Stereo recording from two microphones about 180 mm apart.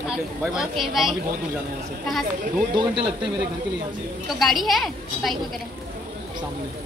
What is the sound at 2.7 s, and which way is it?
Speech, 25° right (ahead or behind).